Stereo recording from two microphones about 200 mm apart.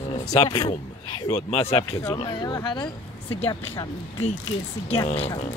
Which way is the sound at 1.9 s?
15° left (ahead or behind).